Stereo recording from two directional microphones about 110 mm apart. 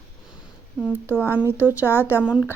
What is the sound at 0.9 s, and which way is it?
Speech, 20° right (ahead or behind).